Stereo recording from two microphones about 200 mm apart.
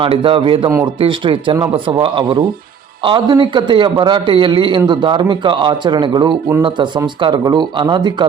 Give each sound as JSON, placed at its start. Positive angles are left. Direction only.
{"t": 0.0, "sound": "speech", "side_deg": -25}